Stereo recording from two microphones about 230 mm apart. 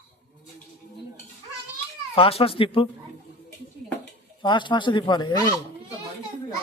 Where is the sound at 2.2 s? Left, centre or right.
Left.